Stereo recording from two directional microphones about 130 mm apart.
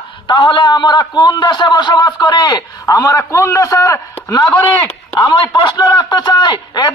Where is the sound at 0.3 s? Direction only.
40° left (ahead or behind).